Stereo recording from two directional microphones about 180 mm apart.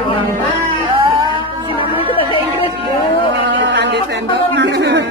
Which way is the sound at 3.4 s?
80° right.